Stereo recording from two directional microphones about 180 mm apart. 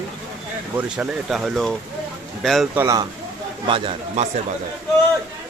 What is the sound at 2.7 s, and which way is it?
Speech, 15° right (ahead or behind).